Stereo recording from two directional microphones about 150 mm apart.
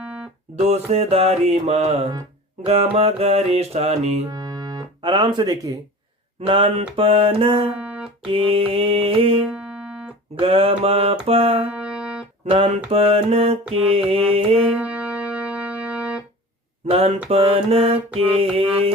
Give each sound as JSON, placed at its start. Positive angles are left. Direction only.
{"t": 0.0, "sound": "music", "side_deg": -10}
{"t": 0.5, "sound": "mantra", "side_deg": -45}
{"t": 4.3, "sound": "music", "side_deg": -25}
{"t": 6.4, "sound": "mantra", "side_deg": -35}
{"t": 7.8, "sound": "music", "side_deg": -10}
{"t": 8.3, "sound": "mantra", "side_deg": -35}
{"t": 9.5, "sound": "music", "side_deg": -10}
{"t": 10.3, "sound": "mantra", "side_deg": -35}
{"t": 11.7, "sound": "music", "side_deg": -10}
{"t": 12.5, "sound": "mantra", "side_deg": -40}
{"t": 14.8, "sound": "music", "side_deg": -10}
{"t": 16.8, "sound": "mantra", "side_deg": -40}